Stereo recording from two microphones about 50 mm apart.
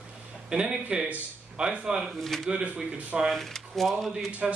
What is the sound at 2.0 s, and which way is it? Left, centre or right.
Speech, centre.